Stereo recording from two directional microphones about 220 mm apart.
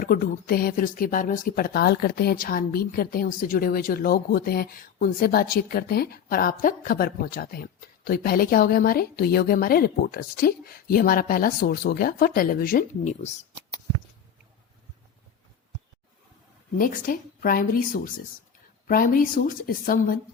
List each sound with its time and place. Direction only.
0.0 s speech: 40° left (ahead or behind)
16.7 s a woman's voice: 40° left (ahead or behind)